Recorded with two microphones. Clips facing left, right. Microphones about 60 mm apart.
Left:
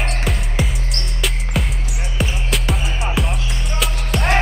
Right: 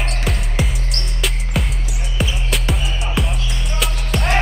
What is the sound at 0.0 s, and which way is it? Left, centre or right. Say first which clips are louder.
Music: left 1 dB; centre.